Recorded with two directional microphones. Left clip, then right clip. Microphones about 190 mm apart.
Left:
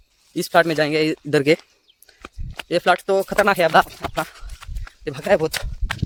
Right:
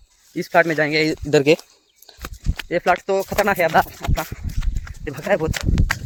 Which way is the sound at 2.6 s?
15° left (ahead or behind).